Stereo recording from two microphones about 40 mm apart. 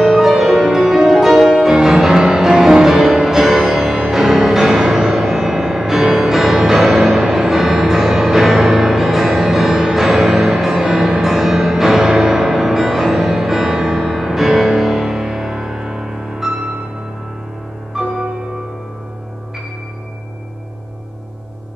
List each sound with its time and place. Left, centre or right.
0.0 s music: centre
17.9 s music: centre